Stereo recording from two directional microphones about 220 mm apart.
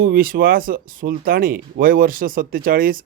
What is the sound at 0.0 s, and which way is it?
Speech, 40° right (ahead or behind).